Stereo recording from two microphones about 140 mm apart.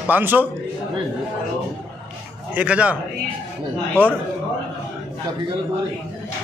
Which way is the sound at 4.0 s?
15° right (ahead or behind).